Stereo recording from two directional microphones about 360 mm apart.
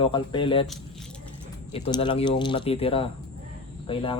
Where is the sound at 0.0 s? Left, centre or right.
Centre.